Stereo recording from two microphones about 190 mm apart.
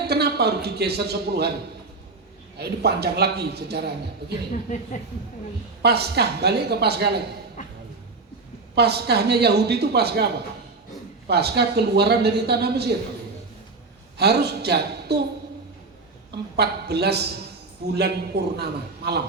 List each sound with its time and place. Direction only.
0.1 s a man's voice: 60° right (ahead or behind)
2.6 s a man's voice: 60° right (ahead or behind)
5.8 s a man's voice: 60° right (ahead or behind)
8.7 s a man's voice: 60° right (ahead or behind)
14.2 s a man's voice: 60° right (ahead or behind)
16.6 s a man's voice: 60° right (ahead or behind)